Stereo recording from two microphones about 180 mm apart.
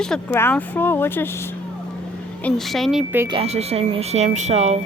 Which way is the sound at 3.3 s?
35° right (ahead or behind).